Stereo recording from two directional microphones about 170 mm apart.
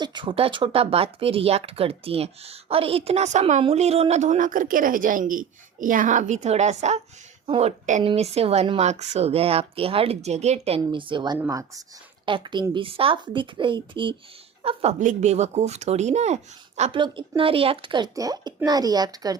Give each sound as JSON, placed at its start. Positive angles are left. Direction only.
{"t": 0.0, "sound": "a woman's voice", "side_deg": -25}
{"t": 11.3, "sound": "speech", "side_deg": -15}
{"t": 12.2, "sound": "a woman's voice", "side_deg": -30}
{"t": 17.0, "sound": "speech", "side_deg": -30}